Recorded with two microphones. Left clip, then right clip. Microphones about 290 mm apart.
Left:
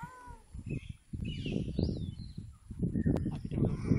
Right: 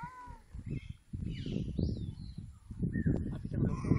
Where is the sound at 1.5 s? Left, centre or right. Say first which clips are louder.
Left 3 dB; left.